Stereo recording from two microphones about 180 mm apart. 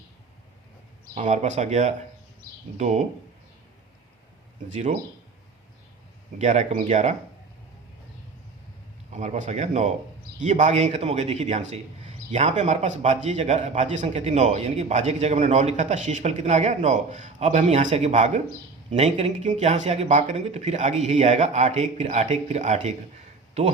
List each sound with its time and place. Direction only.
1.1 s speech: 40° right (ahead or behind)
4.7 s speech: 40° right (ahead or behind)
6.4 s speech: 40° right (ahead or behind)
9.1 s speech: 40° right (ahead or behind)